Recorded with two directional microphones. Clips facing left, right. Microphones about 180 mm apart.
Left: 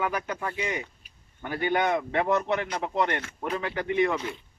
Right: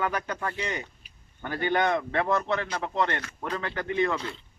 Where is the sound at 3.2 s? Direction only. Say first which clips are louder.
Left 2 dB; 25° left (ahead or behind).